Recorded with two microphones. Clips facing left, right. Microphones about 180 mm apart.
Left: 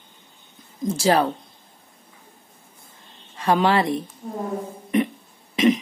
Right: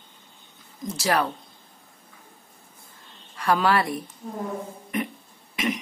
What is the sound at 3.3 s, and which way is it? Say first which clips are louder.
Speech: left 3 dB; 20° left (ahead or behind).